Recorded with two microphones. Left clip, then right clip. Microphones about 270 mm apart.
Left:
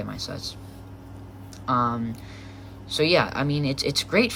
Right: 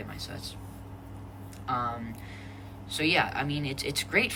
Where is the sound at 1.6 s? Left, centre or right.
Centre.